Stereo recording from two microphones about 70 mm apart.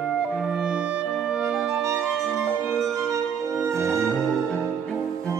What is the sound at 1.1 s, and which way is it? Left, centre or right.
Music, centre.